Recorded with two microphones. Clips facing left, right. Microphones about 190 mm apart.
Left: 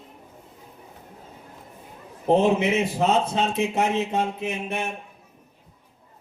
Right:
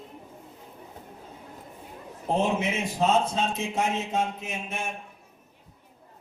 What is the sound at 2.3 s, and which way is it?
A man's voice, 65° left (ahead or behind).